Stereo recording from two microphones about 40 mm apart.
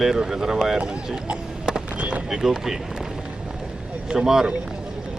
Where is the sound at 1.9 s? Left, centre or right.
Right.